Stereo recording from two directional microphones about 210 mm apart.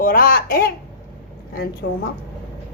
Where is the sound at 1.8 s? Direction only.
55° left (ahead or behind).